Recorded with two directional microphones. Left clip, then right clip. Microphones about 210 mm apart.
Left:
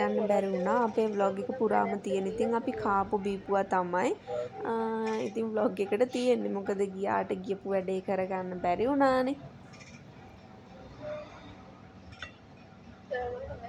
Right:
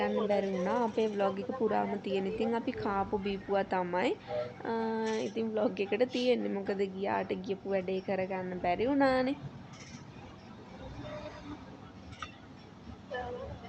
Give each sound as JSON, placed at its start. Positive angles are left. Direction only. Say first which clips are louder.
{"t": 0.0, "sound": "speech", "louder": "left 3 dB", "side_deg": 5}